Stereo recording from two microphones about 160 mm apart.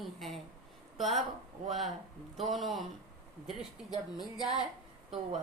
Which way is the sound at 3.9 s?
25° left (ahead or behind).